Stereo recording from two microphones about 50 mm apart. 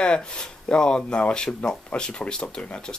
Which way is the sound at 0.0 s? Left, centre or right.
Centre.